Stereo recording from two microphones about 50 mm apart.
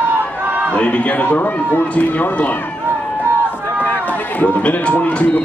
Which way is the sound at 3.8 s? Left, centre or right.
Left.